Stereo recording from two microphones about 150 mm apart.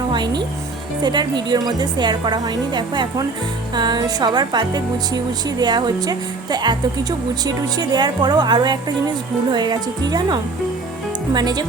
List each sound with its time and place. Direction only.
0.1 s music: 30° right (ahead or behind)
1.0 s speech: 30° right (ahead or behind)